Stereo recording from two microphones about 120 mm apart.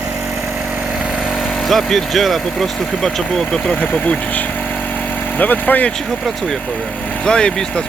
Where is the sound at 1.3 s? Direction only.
Centre (ahead or behind).